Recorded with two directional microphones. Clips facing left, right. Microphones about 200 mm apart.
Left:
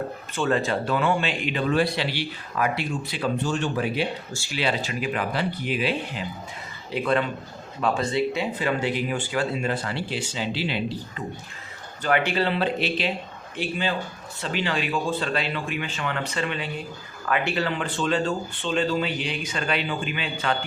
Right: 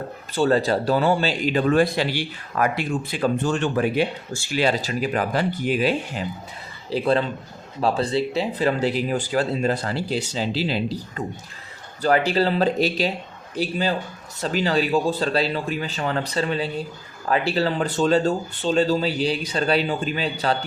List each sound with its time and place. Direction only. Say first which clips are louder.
0.3 s speech: right 5 dB; 35° right (ahead or behind)
6.9 s speech: right 3 dB; 30° right (ahead or behind)
12.0 s speech: right 4 dB; 35° right (ahead or behind)